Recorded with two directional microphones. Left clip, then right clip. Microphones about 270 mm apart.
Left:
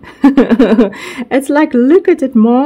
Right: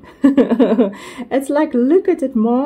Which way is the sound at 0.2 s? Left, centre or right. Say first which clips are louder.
Left 4 dB; left.